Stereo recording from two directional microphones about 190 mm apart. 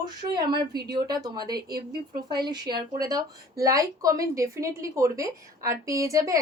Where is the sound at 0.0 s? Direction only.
20° right (ahead or behind).